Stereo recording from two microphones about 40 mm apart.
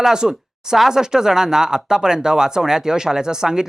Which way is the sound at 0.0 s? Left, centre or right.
Centre.